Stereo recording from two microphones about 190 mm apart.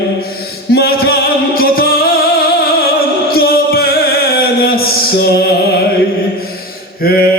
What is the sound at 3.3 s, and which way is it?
Music, 55° left (ahead or behind).